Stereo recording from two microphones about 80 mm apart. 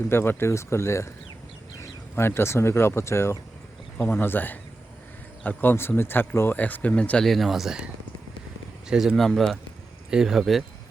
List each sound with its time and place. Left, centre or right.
0.1 s speech: left
2.1 s speech: left; by 7.3 s centre
7.3 s speech: centre
8.9 s speech: centre